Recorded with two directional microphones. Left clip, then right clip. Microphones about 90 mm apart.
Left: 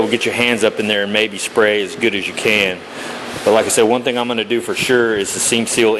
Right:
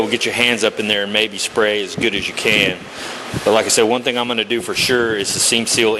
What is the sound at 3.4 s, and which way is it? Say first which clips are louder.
Speech: left 1 dB; centre (ahead or behind).